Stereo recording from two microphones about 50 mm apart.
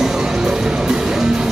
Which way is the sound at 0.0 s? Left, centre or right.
Centre.